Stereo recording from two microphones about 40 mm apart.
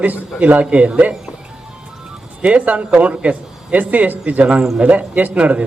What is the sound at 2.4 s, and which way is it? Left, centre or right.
A man's voice, right.